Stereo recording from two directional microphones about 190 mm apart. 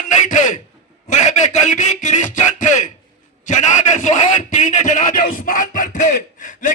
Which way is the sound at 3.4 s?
40° left (ahead or behind).